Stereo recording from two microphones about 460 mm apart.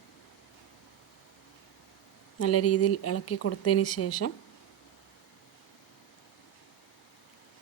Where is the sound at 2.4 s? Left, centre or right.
Left.